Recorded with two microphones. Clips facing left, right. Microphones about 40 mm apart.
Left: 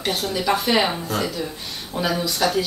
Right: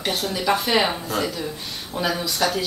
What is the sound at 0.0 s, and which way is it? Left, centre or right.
Speech, centre.